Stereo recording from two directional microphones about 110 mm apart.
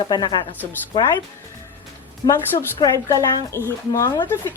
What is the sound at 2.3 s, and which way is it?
A woman's voice, 30° left (ahead or behind).